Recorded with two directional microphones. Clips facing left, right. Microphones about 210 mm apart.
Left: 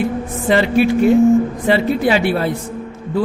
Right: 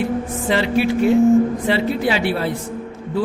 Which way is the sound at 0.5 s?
50° left (ahead or behind).